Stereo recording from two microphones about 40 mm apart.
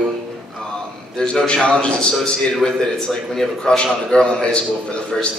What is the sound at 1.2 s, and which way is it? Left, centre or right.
A man's voice, left.